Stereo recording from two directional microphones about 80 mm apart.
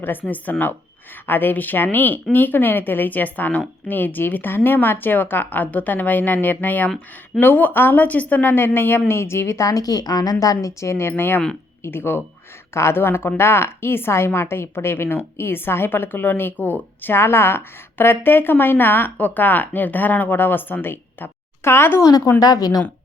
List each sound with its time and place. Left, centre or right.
0.0 s a woman's voice: left
22.0 s a woman's voice: left